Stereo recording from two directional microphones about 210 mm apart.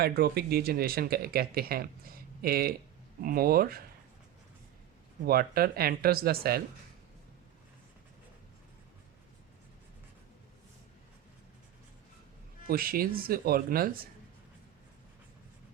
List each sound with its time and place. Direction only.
0.0 s speech: 50° right (ahead or behind)
5.2 s speech: 45° right (ahead or behind)
12.6 s speech: 45° right (ahead or behind)